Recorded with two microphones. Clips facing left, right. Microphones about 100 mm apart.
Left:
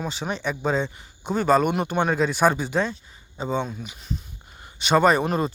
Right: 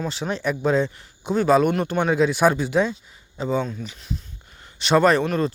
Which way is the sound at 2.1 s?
Centre (ahead or behind).